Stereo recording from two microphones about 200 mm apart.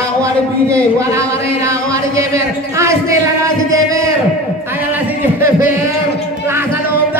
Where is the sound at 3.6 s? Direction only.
15° right (ahead or behind).